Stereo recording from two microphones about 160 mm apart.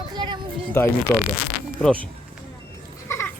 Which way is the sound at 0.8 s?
15° left (ahead or behind).